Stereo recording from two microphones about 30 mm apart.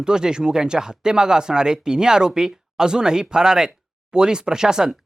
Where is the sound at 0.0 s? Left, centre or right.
Right.